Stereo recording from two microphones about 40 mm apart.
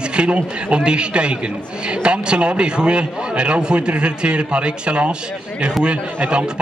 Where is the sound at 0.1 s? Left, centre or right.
Right.